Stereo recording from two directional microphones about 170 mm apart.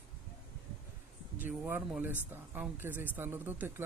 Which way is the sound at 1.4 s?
10° right (ahead or behind).